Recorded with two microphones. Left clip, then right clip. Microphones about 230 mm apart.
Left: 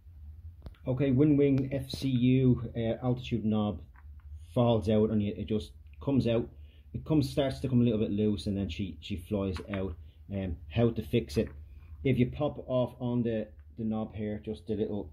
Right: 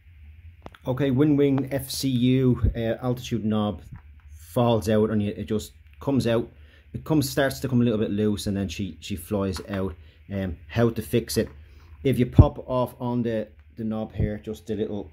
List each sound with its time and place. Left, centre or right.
0.7 s speech: centre
3.9 s a sound: centre
4.6 s speech: centre